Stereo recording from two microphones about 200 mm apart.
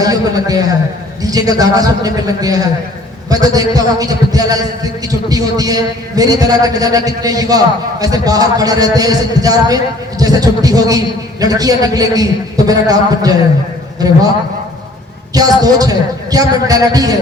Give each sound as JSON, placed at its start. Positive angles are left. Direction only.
{"t": 0.0, "sound": "a man's voice", "side_deg": -20}
{"t": 15.3, "sound": "a man's voice", "side_deg": -20}